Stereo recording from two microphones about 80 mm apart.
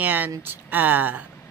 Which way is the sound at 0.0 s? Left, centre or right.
Right.